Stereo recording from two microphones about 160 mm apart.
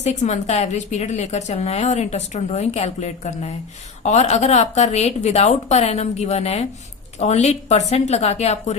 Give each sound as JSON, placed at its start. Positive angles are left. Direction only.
{"t": 0.0, "sound": "a woman's voice", "side_deg": 45}